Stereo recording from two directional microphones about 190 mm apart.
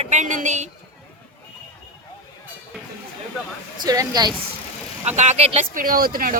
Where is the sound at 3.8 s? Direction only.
20° right (ahead or behind).